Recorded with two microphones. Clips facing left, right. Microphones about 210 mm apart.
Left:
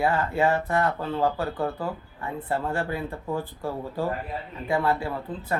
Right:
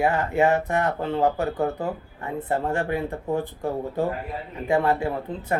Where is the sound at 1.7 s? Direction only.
40° right (ahead or behind).